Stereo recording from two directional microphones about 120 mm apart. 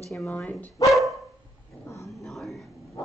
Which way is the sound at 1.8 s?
25° left (ahead or behind).